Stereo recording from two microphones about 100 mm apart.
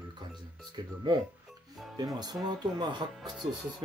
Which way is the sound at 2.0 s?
40° right (ahead or behind).